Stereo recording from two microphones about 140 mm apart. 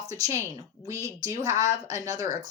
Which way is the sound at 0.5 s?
25° right (ahead or behind).